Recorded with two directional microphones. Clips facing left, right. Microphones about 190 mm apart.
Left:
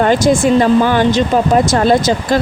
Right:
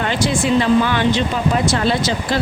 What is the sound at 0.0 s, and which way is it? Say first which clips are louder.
A woman's voice: left 8 dB; 45° left (ahead or behind).